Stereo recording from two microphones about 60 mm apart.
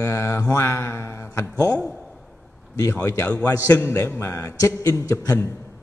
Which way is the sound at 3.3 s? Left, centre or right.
Left.